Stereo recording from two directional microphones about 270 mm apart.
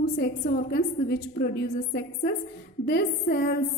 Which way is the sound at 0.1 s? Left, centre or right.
Left.